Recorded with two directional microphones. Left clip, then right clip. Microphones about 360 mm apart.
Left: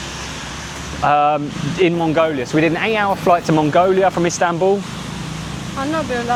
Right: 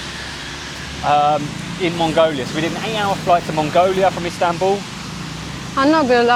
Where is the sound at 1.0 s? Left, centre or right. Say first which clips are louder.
Left 1 dB; left.